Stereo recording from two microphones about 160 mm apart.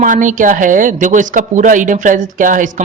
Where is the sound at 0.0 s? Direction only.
50° right (ahead or behind).